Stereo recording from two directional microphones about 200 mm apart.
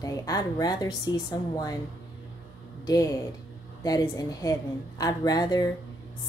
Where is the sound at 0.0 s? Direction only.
15° left (ahead or behind).